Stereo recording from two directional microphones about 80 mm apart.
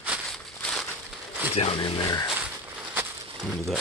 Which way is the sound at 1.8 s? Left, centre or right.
Left.